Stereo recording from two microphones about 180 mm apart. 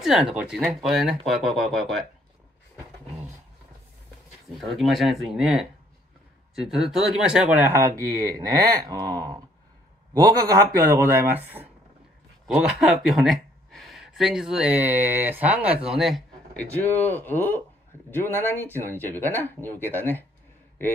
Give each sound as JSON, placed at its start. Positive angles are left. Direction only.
{"t": 0.0, "sound": "speech", "side_deg": -5}
{"t": 4.6, "sound": "speech", "side_deg": 0}
{"t": 10.2, "sound": "speech", "side_deg": -20}
{"t": 16.7, "sound": "speech", "side_deg": 10}